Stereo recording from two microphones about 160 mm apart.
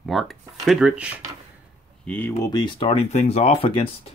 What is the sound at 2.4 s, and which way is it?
Speech, 25° left (ahead or behind).